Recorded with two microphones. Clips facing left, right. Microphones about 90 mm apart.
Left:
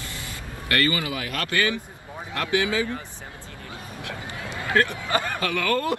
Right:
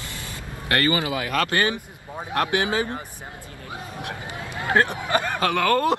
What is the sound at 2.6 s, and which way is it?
Speech, 50° right (ahead or behind).